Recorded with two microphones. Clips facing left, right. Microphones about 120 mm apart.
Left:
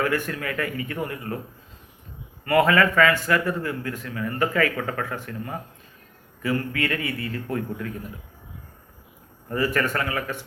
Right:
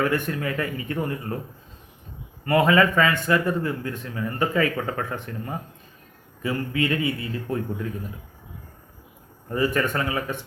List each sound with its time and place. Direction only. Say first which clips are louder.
0.0 s a man's voice: right 1 dB; 25° right (ahead or behind)
2.4 s a man's voice: even; 20° right (ahead or behind)
9.5 s a man's voice: right 1 dB; 20° right (ahead or behind)